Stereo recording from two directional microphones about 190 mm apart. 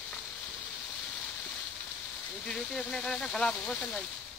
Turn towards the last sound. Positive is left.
turn(degrees=5)  # may be behind; listen again after turning